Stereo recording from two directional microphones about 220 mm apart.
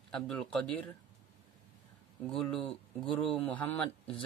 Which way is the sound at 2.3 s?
5° left (ahead or behind).